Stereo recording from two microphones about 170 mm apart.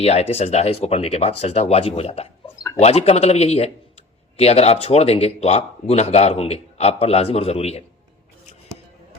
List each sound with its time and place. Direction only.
0.0 s speech: 35° left (ahead or behind)